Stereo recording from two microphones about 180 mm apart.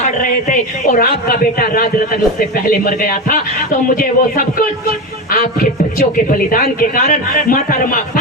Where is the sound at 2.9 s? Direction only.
50° left (ahead or behind).